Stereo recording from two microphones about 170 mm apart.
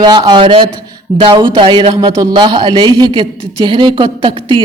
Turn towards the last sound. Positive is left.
turn(degrees=-30)  # may be behind; listen again after turning